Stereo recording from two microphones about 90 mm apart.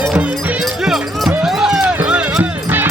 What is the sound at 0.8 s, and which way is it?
Music, 5° right (ahead or behind).